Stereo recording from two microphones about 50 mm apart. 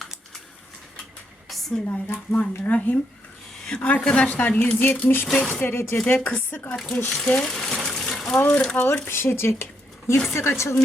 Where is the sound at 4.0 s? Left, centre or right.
Left.